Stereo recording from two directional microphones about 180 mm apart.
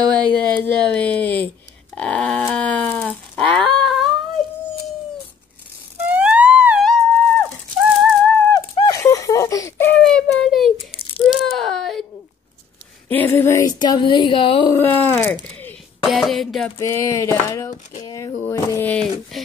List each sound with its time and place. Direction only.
0.1 s speech: 5° left (ahead or behind)
2.0 s a sound: 5° left (ahead or behind)
6.0 s music: 5° right (ahead or behind)
8.5 s a sound: 20° left (ahead or behind); by 10.7 s centre (ahead or behind)
11.1 s wail: centre (ahead or behind)
13.1 s a woman's voice: 10° left (ahead or behind)
14.8 s speech: 10° left (ahead or behind)
16.0 s speech: centre (ahead or behind)
16.7 s speech: 15° left (ahead or behind)